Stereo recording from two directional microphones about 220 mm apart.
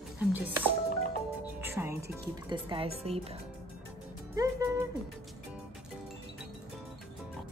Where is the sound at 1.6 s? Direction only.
10° right (ahead or behind).